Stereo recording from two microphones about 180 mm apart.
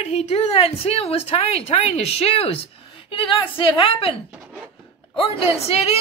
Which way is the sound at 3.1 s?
30° left (ahead or behind).